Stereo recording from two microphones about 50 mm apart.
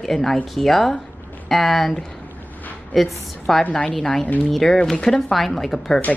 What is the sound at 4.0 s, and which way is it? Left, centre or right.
A woman's voice, centre.